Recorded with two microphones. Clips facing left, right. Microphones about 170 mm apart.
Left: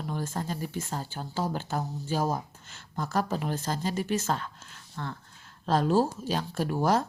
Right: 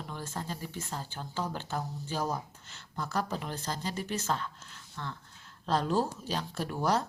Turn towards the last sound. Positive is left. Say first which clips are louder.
# left 4 dB
turn(degrees=50)  # may be behind; listen again after turning